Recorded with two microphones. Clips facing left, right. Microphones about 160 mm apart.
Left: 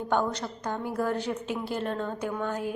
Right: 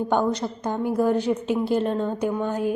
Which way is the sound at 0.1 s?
15° right (ahead or behind).